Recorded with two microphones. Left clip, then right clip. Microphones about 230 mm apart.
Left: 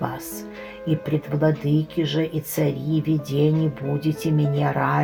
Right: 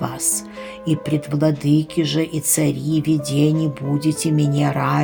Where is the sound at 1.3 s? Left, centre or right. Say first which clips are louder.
Right 4 dB; right.